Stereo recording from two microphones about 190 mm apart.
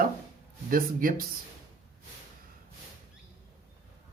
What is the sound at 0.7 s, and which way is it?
Speech, 50° right (ahead or behind).